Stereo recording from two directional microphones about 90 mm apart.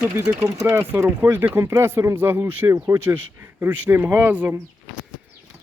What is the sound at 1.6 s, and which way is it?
Speech, 40° right (ahead or behind).